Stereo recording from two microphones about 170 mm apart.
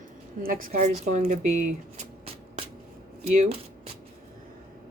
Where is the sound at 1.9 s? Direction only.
35° right (ahead or behind).